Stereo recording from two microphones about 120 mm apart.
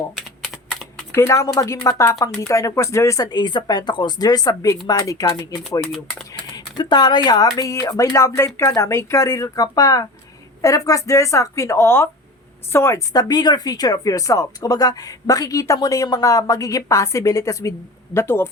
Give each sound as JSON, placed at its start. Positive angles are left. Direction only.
{"t": 0.4, "sound": "typing", "side_deg": 0}
{"t": 1.1, "sound": "speech", "side_deg": 25}
{"t": 6.7, "sound": "speech", "side_deg": 40}